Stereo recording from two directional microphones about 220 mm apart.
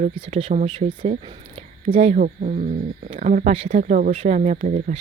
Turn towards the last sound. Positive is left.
turn(degrees=-35)  # may be behind; listen again after turning